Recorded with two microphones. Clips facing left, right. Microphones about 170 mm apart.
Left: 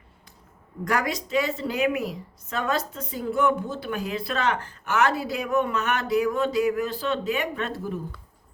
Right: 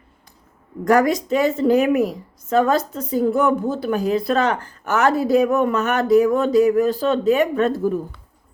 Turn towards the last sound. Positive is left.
turn(degrees=-45)  # may be behind; listen again after turning